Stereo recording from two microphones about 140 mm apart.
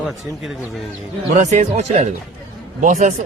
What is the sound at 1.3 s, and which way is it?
Speech, 55° right (ahead or behind).